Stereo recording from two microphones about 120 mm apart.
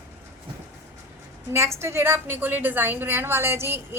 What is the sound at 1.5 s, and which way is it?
A woman's voice, 25° right (ahead or behind).